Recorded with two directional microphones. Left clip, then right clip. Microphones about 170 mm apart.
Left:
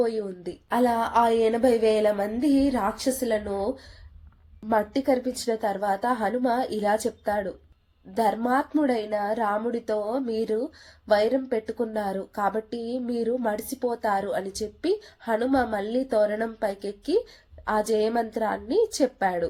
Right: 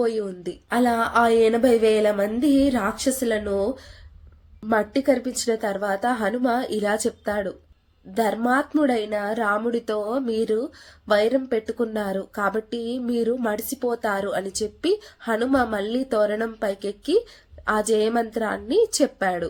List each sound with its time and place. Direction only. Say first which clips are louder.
0.0 s a woman's voice: right 2 dB; 20° right (ahead or behind)